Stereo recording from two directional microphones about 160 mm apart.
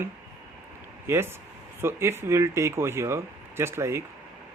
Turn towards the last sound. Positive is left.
turn(degrees=-15)  # may be behind; listen again after turning